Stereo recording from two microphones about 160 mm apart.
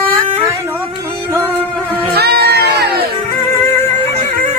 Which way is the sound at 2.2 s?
80° right.